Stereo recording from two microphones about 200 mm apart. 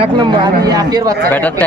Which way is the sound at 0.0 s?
20° right (ahead or behind).